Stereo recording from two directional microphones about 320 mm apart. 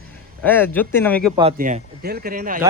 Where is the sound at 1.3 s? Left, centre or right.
Right.